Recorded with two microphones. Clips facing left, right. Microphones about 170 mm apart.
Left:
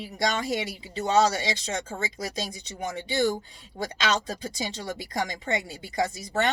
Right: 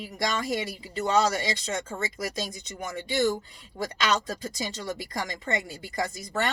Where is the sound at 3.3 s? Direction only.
25° left (ahead or behind).